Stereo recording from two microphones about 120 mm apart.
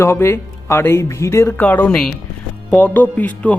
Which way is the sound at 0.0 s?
20° left (ahead or behind).